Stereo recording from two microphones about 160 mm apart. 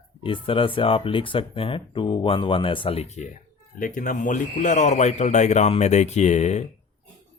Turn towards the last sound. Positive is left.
turn(degrees=45)  # may be behind; listen again after turning